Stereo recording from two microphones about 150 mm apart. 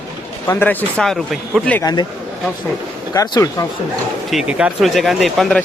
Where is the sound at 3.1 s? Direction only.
25° left (ahead or behind).